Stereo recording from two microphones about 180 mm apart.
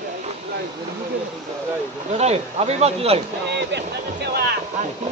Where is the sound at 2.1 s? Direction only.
35° right (ahead or behind).